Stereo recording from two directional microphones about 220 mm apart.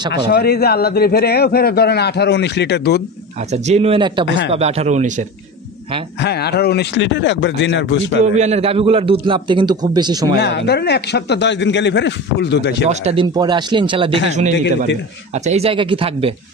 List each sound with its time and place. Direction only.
0.3 s a man's voice: 45° left (ahead or behind)
3.5 s a man's voice: 30° right (ahead or behind)
6.2 s a man's voice: 50° left (ahead or behind)
8.2 s a man's voice: 30° right (ahead or behind)
10.4 s a man's voice: 50° left (ahead or behind)
12.8 s a man's voice: 25° right (ahead or behind)